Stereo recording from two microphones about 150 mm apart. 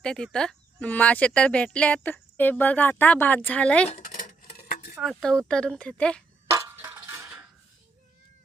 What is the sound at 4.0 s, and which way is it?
Dishes, 65° left (ahead or behind).